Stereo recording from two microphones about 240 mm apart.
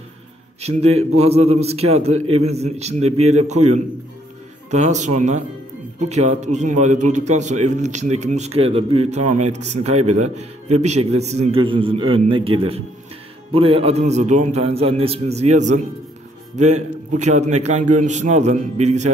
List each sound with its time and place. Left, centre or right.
0.6 s a man's voice: right